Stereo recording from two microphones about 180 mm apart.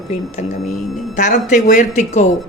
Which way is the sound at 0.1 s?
40° left (ahead or behind).